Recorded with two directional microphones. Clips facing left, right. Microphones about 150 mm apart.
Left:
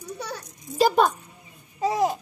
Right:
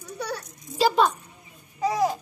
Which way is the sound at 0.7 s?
50° left (ahead or behind).